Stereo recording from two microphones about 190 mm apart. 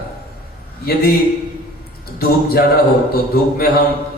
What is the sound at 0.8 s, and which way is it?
Speech, 55° left (ahead or behind).